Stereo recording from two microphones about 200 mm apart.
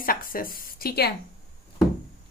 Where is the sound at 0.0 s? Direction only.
45° left (ahead or behind).